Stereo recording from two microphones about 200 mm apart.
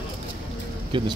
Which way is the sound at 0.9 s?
25° right (ahead or behind).